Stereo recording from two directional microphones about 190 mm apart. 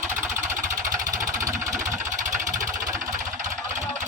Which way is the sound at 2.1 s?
40° right (ahead or behind).